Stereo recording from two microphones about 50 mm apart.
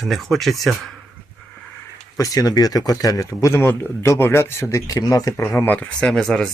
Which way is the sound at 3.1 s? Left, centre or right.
Left.